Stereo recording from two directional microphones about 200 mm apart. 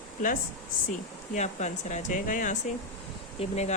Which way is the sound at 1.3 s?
35° left (ahead or behind).